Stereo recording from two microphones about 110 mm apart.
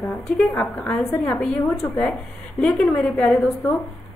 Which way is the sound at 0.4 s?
10° left (ahead or behind).